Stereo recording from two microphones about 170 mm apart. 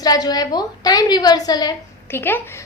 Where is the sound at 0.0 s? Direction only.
20° left (ahead or behind).